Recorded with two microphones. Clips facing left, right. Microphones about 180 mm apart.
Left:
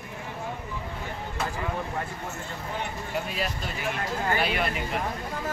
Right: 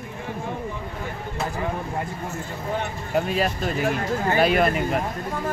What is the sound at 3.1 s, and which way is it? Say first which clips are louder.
Speech: right 9 dB; 45° right (ahead or behind).